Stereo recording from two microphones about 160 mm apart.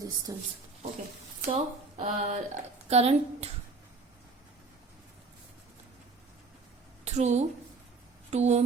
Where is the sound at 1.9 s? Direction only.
50° right (ahead or behind).